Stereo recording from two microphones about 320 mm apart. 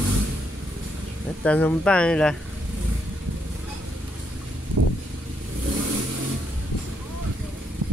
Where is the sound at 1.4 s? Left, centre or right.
Centre.